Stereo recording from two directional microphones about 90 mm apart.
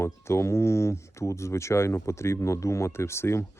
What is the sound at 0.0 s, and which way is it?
Speech, 30° left (ahead or behind).